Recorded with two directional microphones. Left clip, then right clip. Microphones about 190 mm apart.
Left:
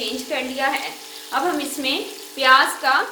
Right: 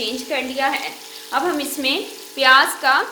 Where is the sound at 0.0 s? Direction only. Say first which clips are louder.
Right 2 dB; 55° right (ahead or behind); by 3.1 s 30° right (ahead or behind).